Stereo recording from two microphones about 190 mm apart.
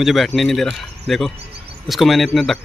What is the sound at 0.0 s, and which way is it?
Speech, centre (ahead or behind).